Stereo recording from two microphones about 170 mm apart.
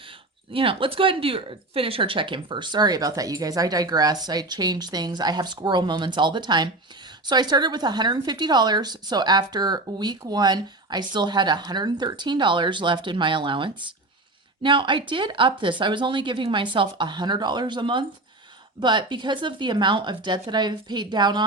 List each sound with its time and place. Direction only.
0.5 s a woman's voice: 30° right (ahead or behind)